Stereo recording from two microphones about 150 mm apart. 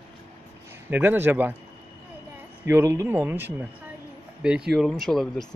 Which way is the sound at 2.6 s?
15° right (ahead or behind).